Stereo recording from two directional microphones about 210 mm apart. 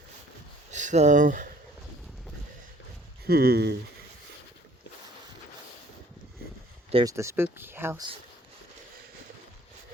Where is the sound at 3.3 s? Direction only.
45° right (ahead or behind).